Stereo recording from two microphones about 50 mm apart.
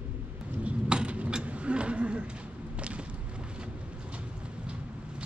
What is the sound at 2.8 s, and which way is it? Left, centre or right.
Vehicle, right.